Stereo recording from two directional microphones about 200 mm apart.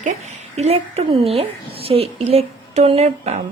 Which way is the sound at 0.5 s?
30° right (ahead or behind).